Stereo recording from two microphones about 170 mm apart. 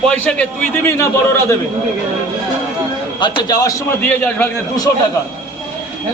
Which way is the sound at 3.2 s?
25° left (ahead or behind).